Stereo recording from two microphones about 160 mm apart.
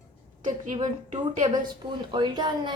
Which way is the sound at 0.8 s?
50° right (ahead or behind).